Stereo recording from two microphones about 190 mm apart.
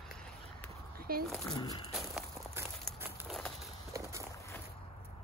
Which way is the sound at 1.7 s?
25° left (ahead or behind).